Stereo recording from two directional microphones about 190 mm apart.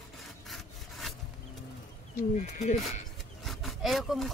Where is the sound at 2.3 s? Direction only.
40° left (ahead or behind).